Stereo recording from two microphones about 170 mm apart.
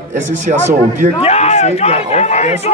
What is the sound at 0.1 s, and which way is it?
A man's voice, 45° right (ahead or behind).